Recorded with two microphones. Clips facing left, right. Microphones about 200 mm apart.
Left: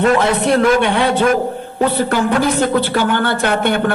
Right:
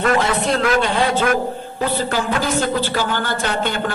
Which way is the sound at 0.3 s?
65° left (ahead or behind).